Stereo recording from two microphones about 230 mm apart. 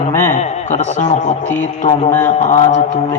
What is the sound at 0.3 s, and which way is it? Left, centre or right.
A man's voice, left.